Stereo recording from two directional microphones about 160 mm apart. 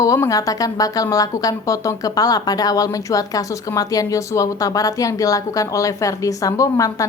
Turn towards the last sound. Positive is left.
turn(degrees=20)  # may be behind; listen again after turning